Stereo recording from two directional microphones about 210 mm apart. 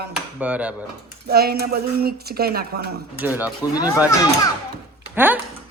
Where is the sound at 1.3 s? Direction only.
50° right (ahead or behind).